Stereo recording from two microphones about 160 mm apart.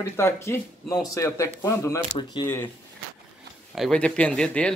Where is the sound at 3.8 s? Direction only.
5° left (ahead or behind).